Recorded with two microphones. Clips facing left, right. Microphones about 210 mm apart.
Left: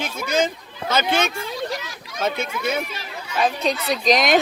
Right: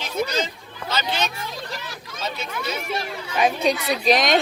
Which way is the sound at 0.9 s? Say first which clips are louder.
Left 5 dB; 50° left (ahead or behind).